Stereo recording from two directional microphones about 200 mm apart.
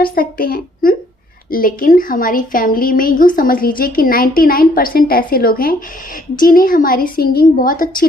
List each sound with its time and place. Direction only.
0.0 s speech: 45° left (ahead or behind)